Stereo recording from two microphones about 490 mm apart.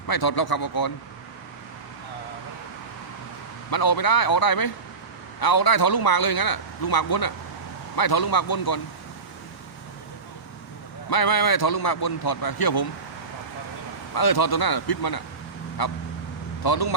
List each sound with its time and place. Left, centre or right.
0.1 s a man's voice: left
3.7 s a man's voice: left
11.1 s a man's voice: left
14.1 s a man's voice: left